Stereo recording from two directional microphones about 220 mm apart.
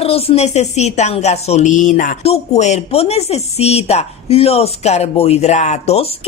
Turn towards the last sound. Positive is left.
turn(degrees=30)  # may be behind; listen again after turning